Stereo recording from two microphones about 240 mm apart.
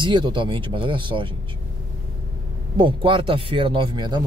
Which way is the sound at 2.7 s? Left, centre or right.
Right.